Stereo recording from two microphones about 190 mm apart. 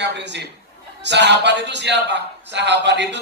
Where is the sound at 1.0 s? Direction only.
65° right (ahead or behind).